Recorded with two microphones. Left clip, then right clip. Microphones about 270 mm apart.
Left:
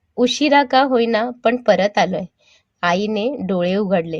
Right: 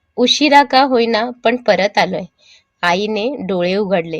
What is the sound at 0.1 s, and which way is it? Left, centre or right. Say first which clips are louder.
A woman's voice: right 4 dB; right.